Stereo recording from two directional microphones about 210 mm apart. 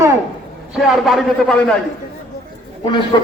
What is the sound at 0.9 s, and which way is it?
Speech, centre (ahead or behind).